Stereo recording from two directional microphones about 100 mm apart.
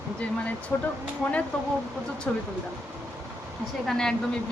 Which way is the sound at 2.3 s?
10° left (ahead or behind).